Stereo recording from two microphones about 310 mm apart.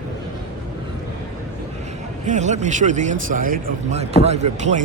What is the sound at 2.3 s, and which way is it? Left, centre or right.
A man's voice, right.